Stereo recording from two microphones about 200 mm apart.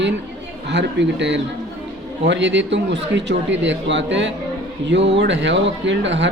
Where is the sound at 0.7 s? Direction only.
60° right (ahead or behind).